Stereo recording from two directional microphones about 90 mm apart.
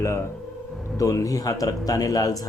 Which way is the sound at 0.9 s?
35° left (ahead or behind).